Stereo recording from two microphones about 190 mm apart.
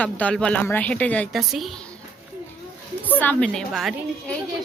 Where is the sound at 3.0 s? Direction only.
10° left (ahead or behind).